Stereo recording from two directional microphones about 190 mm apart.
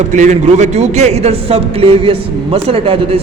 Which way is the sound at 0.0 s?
40° right (ahead or behind).